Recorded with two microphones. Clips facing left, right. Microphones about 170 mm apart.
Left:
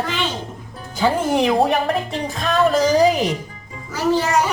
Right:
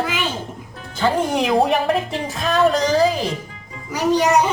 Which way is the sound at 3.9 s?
15° right (ahead or behind).